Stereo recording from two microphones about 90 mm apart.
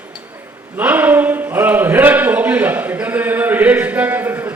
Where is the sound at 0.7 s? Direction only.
20° right (ahead or behind).